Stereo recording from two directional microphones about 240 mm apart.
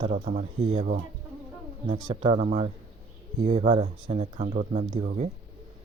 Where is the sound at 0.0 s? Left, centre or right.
Right.